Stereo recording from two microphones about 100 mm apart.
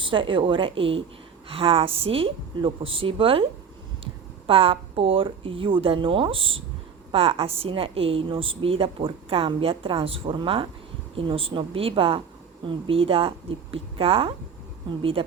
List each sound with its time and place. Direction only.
0.0 s a woman's voice: 55° right (ahead or behind)